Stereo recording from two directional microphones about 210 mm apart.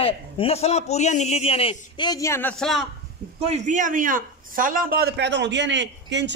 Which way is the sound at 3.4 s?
35° right (ahead or behind).